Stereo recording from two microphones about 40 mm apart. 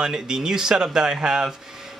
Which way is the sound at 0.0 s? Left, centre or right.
Centre.